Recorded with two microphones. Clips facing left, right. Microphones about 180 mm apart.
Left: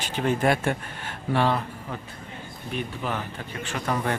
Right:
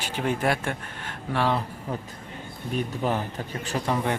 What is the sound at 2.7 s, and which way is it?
Speech, 35° right (ahead or behind).